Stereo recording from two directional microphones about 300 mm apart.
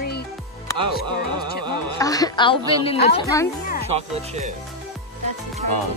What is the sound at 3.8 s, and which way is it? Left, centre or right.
Speech, right.